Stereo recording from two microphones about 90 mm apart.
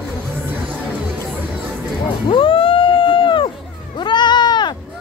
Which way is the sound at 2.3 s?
75° left (ahead or behind).